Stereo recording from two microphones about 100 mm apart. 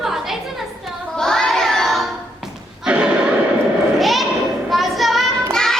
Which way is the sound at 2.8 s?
10° right (ahead or behind).